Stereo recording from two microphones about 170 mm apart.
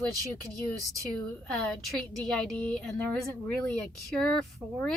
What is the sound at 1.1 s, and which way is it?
A woman's voice, 5° left (ahead or behind).